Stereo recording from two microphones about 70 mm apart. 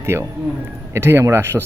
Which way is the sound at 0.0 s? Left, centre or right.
Right.